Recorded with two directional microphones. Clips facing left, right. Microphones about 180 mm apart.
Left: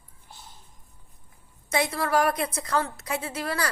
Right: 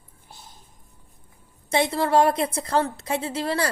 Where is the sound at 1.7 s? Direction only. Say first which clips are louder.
Right 5 dB; 25° right (ahead or behind).